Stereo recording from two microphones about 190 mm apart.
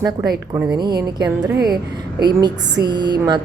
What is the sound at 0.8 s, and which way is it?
A woman's voice, 20° right (ahead or behind).